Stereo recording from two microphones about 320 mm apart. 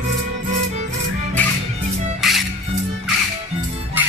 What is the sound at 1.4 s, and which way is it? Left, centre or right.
Music, centre.